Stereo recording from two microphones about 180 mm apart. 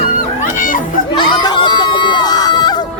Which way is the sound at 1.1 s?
25° left (ahead or behind).